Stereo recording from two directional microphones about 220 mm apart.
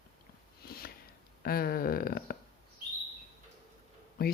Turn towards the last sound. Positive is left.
turn(degrees=45)  # may be behind; listen again after turning